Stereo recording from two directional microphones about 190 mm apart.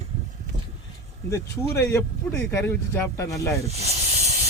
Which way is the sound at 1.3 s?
15° left (ahead or behind).